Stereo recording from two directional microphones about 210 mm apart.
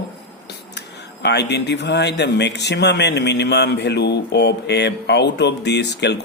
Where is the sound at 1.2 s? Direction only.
55° left (ahead or behind).